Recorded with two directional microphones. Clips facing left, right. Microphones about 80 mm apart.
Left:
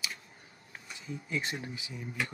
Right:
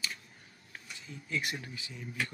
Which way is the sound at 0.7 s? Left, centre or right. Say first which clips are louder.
Left 5 dB; left.